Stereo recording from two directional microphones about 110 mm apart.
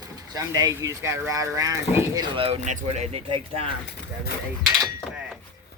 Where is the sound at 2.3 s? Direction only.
65° right (ahead or behind).